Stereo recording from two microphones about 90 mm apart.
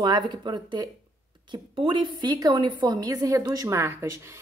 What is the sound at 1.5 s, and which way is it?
A woman's voice, 65° right (ahead or behind).